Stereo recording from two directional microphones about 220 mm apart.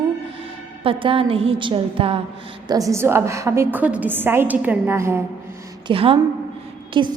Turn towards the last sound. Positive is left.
turn(degrees=-20)  # may be behind; listen again after turning